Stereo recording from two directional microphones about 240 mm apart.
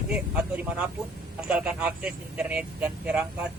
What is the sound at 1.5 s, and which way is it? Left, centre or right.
Speech, centre.